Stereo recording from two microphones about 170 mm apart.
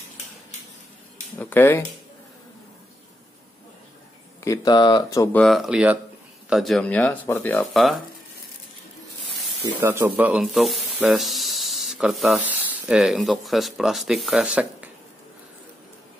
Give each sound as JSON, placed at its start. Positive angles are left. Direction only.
{"t": 1.4, "sound": "speech", "side_deg": 10}
{"t": 4.5, "sound": "speech", "side_deg": 25}
{"t": 5.3, "sound": "speech", "side_deg": 0}
{"t": 9.6, "sound": "speech", "side_deg": -15}